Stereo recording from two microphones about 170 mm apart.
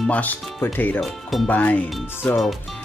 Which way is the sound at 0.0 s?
10° left (ahead or behind).